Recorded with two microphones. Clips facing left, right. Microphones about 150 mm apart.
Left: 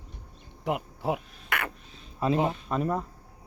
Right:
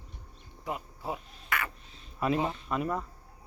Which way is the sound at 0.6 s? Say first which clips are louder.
Left 7 dB; 65° left (ahead or behind).